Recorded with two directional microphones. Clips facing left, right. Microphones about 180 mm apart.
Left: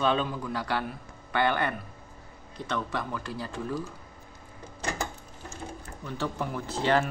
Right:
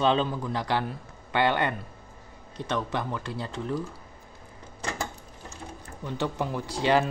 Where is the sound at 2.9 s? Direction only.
25° right (ahead or behind).